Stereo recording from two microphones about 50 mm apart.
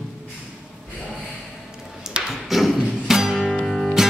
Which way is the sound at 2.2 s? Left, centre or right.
Centre.